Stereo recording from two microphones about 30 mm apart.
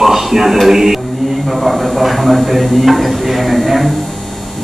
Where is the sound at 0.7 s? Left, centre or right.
Centre.